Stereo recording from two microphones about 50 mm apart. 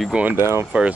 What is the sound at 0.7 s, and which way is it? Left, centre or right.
Speech, right.